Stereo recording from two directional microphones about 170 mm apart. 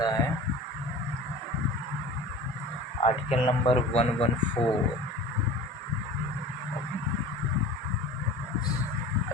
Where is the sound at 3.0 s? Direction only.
35° left (ahead or behind).